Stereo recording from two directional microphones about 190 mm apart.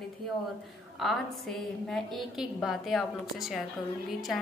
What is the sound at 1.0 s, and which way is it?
A woman's voice, centre (ahead or behind).